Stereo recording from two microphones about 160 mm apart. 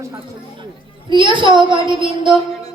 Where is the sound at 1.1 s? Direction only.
30° right (ahead or behind).